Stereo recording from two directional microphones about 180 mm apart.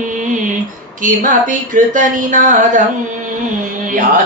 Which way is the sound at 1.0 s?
45° right (ahead or behind).